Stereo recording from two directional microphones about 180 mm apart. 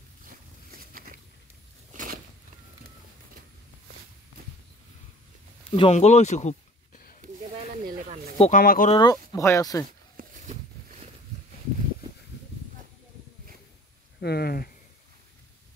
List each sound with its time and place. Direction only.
5.7 s speech: 35° left (ahead or behind)
7.2 s snake: 45° right (ahead or behind)
8.4 s speech: 45° left (ahead or behind)
8.9 s speech: 20° left (ahead or behind)
9.8 s a sound: 45° right (ahead or behind)
14.2 s a sound: 60° left (ahead or behind)